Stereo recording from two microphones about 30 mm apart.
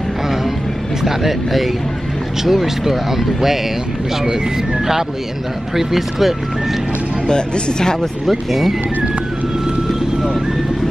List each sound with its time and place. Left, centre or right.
1.0 s speech: centre
5.8 s speech: centre
7.2 s speech: left
8.3 s speech: centre